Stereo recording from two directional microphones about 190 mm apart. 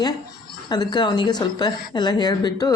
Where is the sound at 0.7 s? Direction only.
20° left (ahead or behind).